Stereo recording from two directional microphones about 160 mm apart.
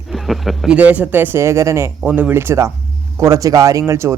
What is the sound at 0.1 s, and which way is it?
Speech, centre (ahead or behind).